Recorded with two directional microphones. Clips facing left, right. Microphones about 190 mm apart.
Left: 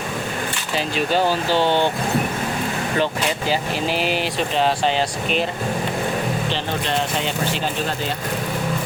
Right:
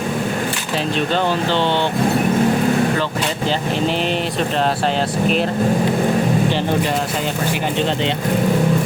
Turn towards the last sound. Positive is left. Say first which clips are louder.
# right 4 dB
turn(degrees=-20)  # may be behind; listen again after turning